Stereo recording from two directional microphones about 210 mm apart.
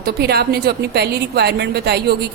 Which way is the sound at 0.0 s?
50° right (ahead or behind).